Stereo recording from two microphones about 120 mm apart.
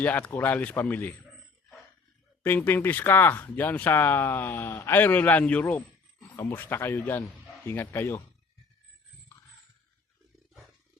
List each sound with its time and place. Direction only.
0.0 s speech: 15° left (ahead or behind)
2.4 s speech: 15° left (ahead or behind)
6.3 s speech: 20° left (ahead or behind)